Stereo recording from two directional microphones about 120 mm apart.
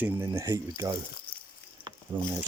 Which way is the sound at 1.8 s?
15° right (ahead or behind).